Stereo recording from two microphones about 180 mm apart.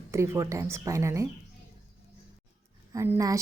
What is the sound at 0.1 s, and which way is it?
A woman's voice, 15° right (ahead or behind).